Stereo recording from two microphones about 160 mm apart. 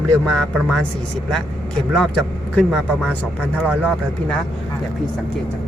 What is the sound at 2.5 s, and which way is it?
Speech, 5° left (ahead or behind).